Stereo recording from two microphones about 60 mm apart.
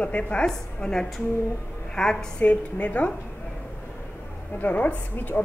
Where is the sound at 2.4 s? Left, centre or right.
Left.